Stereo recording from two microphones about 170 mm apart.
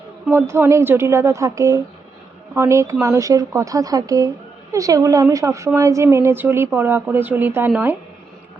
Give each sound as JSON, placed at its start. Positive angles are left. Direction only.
{"t": 0.3, "sound": "a woman's voice", "side_deg": -15}